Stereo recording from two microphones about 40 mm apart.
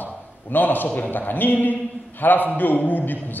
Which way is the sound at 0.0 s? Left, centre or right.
Left.